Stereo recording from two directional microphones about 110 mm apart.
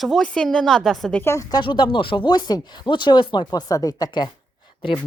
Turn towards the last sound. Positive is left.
turn(degrees=45)  # may be behind; listen again after turning